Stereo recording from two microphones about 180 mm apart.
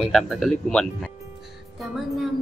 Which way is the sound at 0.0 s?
Centre (ahead or behind).